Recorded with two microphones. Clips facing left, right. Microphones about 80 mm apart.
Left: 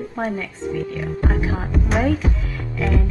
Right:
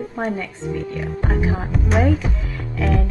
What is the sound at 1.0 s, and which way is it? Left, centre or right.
Speech, centre.